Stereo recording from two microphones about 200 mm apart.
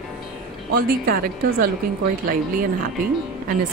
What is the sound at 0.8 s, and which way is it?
Speech, 50° right (ahead or behind).